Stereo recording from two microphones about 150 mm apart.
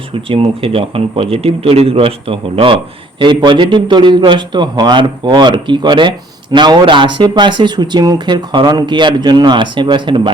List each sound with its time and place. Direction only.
0.1 s a man's voice: 35° right (ahead or behind)